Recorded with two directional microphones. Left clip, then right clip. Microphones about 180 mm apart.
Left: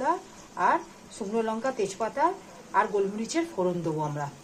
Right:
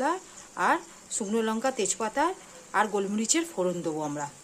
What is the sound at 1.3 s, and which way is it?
Speech, 50° right (ahead or behind).